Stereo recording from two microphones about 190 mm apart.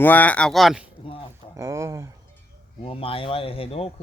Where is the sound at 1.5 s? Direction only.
15° right (ahead or behind).